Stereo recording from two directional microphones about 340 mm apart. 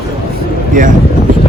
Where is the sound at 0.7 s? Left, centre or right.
Right.